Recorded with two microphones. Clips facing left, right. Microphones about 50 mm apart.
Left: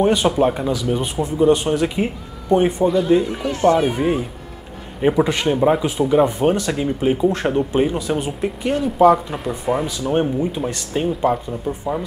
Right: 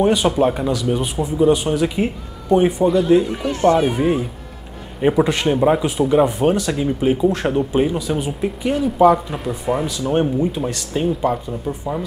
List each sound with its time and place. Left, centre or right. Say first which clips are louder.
0.0 s speech: even; centre
1.7 s speech: even; centre